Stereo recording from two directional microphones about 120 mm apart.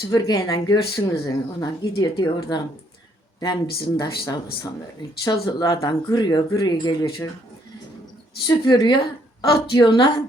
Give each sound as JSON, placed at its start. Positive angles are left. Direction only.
{"t": 0.1, "sound": "speech", "side_deg": 30}
{"t": 8.4, "sound": "speech", "side_deg": 35}